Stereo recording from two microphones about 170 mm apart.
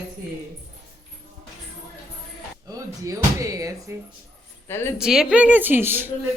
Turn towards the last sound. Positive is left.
turn(degrees=-10)  # may be behind; listen again after turning